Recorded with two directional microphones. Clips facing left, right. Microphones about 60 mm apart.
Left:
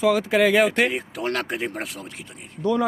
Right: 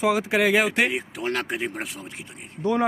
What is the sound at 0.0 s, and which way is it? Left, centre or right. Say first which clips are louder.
Speech: left 2 dB; centre.